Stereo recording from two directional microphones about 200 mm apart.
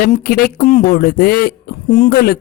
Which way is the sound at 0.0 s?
45° left (ahead or behind).